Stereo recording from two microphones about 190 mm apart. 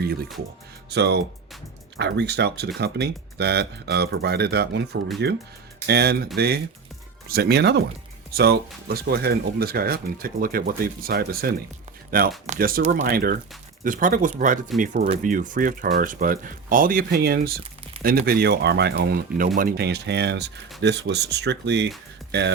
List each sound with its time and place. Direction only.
0.0 s speech: 55° right (ahead or behind)